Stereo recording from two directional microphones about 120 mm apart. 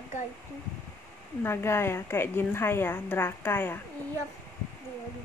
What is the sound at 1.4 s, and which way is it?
A woman's voice, 20° left (ahead or behind).